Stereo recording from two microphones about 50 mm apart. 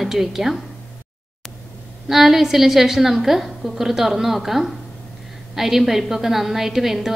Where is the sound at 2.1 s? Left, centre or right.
Centre.